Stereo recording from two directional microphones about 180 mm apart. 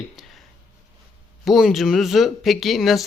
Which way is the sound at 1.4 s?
Centre (ahead or behind).